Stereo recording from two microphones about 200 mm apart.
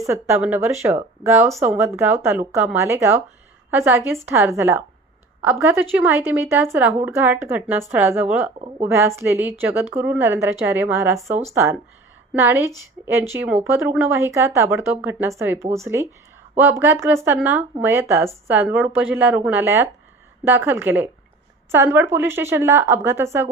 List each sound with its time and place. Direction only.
0.0 s a woman's voice: 15° right (ahead or behind)
8.5 s speech: 30° right (ahead or behind)
8.9 s a woman's voice: 15° right (ahead or behind)